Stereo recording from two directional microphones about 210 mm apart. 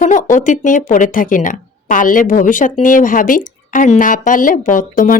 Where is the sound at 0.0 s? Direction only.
35° left (ahead or behind).